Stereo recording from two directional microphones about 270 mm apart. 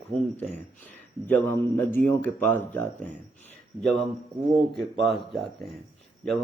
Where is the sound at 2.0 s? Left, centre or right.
Centre.